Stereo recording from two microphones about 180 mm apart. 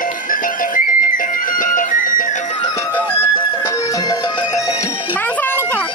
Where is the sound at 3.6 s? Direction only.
20° left (ahead or behind).